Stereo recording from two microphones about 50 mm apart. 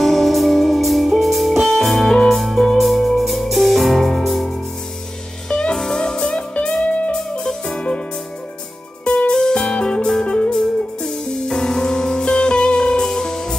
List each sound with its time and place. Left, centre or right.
0.0 s music: centre
5.5 s music: centre
6.8 s music: left
7.4 s music: centre
9.3 s music: centre